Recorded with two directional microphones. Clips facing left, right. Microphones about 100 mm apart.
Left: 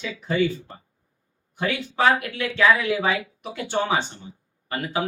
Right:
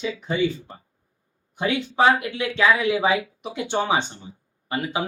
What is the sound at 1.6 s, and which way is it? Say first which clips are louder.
Speech: right 3 dB; 20° right (ahead or behind).